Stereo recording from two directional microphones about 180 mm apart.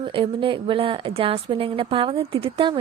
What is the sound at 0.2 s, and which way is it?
A woman's voice, 30° right (ahead or behind).